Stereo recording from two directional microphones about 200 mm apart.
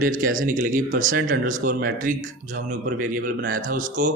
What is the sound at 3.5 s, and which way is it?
Speech, 45° right (ahead or behind).